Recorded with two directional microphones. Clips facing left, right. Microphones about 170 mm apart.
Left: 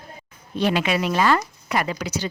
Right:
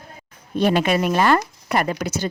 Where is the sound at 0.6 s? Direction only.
50° right (ahead or behind).